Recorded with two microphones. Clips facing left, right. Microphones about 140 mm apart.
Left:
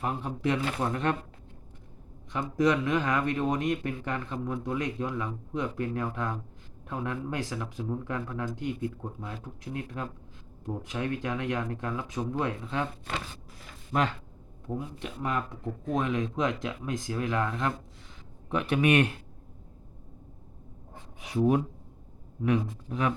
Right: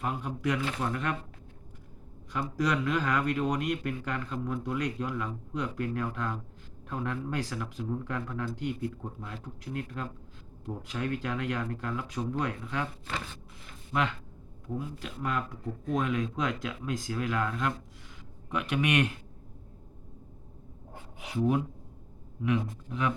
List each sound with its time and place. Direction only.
0.0 s speech: 30° left (ahead or behind)
2.3 s speech: 20° left (ahead or behind)
13.9 s speech: 35° left (ahead or behind)
14.8 s speech: 25° left (ahead or behind)
21.3 s speech: 35° left (ahead or behind)
22.9 s speech: 35° left (ahead or behind)